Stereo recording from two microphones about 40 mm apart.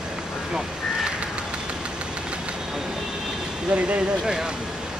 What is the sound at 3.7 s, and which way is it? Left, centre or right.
Speech, right.